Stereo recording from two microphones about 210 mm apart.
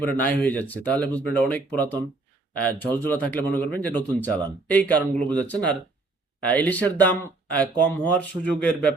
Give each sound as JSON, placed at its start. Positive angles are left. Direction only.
{"t": 0.0, "sound": "speech", "side_deg": 10}